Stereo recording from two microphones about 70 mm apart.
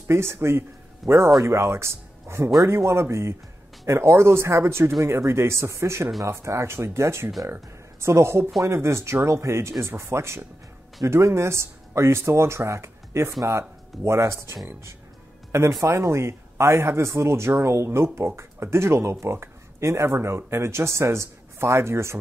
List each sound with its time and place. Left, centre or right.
0.1 s speech: right
15.8 s speech: right